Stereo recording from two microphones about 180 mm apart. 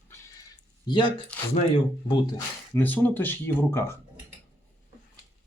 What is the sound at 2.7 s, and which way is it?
Speech, 10° left (ahead or behind).